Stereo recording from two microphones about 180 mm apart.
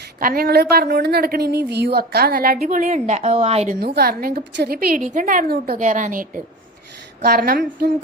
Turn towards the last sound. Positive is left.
turn(degrees=-55)  # may be behind; listen again after turning